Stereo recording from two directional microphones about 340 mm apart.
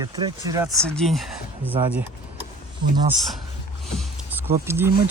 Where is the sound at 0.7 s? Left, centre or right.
Centre.